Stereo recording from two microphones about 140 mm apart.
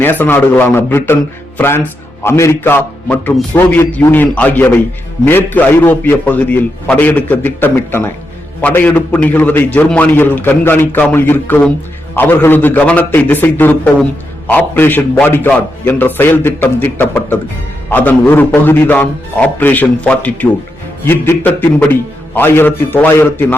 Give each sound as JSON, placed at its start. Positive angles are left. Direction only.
{"t": 0.0, "sound": "a man's voice", "side_deg": 15}